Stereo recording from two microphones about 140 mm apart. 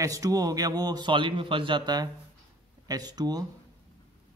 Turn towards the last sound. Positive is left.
turn(degrees=-30)  # may be behind; listen again after turning